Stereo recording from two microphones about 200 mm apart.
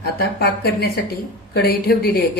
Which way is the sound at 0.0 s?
50° left (ahead or behind).